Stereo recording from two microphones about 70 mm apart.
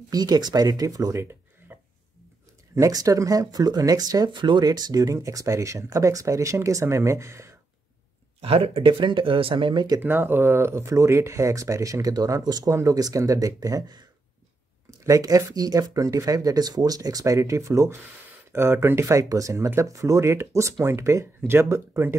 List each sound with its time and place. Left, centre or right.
0.1 s speech: right
1.7 s a sound: right
2.7 s speech: right
9.7 s speech: right
9.9 s speech: right
15.0 s speech: right